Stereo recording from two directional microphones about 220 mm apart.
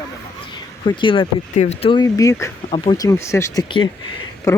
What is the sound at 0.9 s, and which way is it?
Speech, 20° left (ahead or behind).